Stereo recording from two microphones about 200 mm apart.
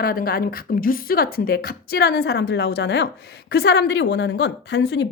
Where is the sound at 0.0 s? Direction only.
45° left (ahead or behind).